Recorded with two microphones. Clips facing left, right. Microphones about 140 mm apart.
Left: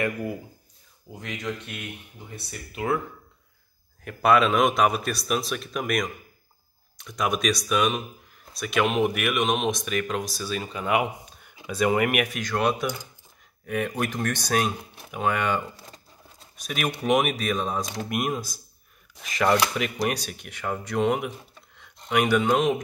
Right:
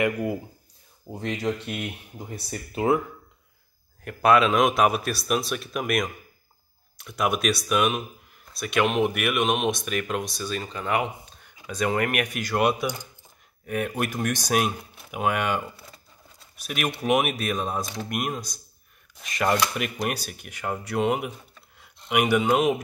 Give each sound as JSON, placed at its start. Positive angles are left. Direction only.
{"t": 0.0, "sound": "speech", "side_deg": -20}
{"t": 1.1, "sound": "speech", "side_deg": -35}
{"t": 4.0, "sound": "speech", "side_deg": 0}
{"t": 12.4, "sound": "speech", "side_deg": -10}